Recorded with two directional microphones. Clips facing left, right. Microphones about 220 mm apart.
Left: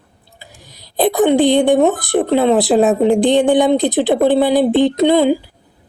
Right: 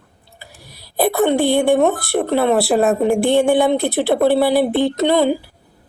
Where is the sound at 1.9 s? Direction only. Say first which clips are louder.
Left 3 dB; 15° left (ahead or behind).